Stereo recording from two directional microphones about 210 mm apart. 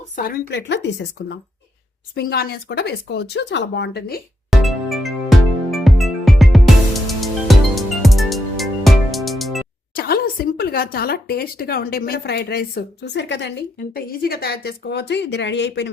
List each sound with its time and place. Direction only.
0.2 s speech: 50° left (ahead or behind)
4.5 s music: centre (ahead or behind)
9.9 s speech: 45° left (ahead or behind)
13.9 s speech: 45° left (ahead or behind)